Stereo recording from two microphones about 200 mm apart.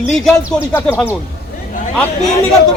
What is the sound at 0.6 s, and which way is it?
Speech, 10° left (ahead or behind).